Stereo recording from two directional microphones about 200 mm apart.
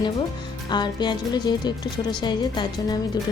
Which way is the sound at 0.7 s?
20° left (ahead or behind).